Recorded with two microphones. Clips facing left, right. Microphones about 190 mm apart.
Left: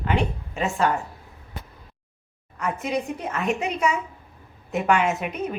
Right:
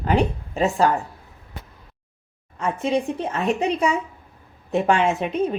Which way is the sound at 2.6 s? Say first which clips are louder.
Right 4 dB; 30° right (ahead or behind).